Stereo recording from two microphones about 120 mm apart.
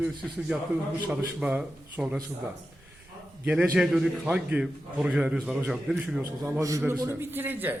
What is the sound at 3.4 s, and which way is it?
A man's voice, 10° right (ahead or behind).